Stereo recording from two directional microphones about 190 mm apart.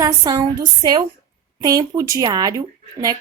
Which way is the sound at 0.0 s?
20° right (ahead or behind).